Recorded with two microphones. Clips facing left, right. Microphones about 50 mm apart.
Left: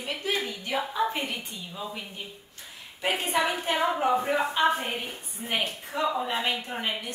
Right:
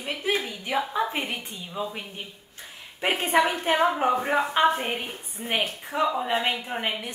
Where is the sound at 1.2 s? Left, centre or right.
Right.